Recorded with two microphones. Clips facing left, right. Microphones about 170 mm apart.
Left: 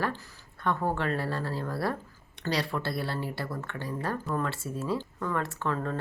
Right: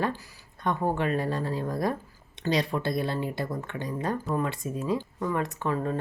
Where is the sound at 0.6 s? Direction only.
15° right (ahead or behind).